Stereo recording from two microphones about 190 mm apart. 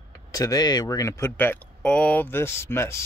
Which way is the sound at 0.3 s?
20° left (ahead or behind).